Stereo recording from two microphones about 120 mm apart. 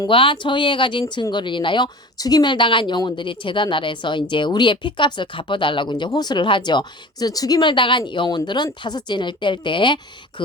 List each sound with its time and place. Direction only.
0.1 s speech: 45° left (ahead or behind)